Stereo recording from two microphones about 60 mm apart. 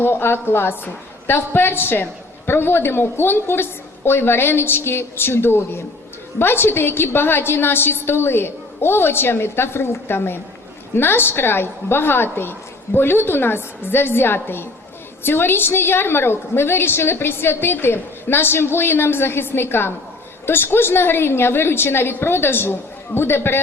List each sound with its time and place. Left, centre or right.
0.0 s a woman's voice: left